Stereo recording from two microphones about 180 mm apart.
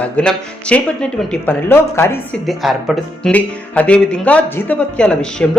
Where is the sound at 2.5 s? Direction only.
Centre (ahead or behind).